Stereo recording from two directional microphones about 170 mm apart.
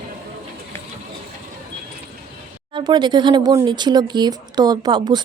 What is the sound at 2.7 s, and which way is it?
Speech, 25° right (ahead or behind).